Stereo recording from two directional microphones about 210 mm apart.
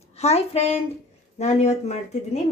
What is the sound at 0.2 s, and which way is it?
Speech, 30° left (ahead or behind).